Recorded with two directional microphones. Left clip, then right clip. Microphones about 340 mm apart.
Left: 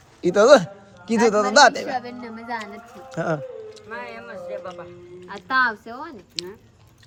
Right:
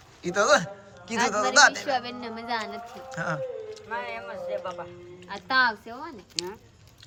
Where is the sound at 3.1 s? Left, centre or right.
Centre.